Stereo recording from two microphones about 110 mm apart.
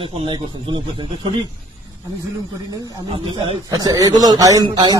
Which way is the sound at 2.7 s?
35° right (ahead or behind).